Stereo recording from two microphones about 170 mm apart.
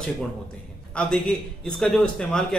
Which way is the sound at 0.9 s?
5° left (ahead or behind).